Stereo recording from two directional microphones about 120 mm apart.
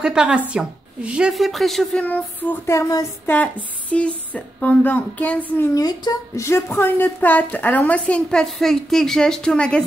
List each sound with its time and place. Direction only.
0.0 s a woman's voice: 5° right (ahead or behind)
2.0 s a woman's voice: 15° left (ahead or behind)
3.9 s a woman's voice: 10° left (ahead or behind)
5.8 s a woman's voice: 30° left (ahead or behind); by 9.8 s 5° left (ahead or behind)